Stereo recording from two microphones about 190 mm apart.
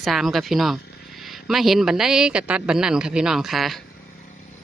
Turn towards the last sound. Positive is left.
turn(degrees=0)  # may be behind; listen again after turning